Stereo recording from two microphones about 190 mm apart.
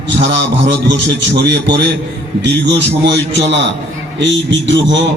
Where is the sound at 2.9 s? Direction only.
70° right (ahead or behind).